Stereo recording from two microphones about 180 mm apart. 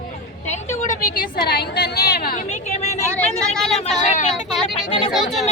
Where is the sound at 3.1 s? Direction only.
5° left (ahead or behind).